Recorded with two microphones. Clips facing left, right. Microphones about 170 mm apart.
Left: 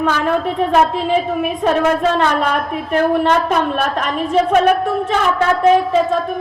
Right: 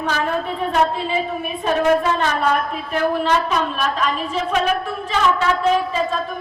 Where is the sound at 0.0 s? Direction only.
60° left (ahead or behind).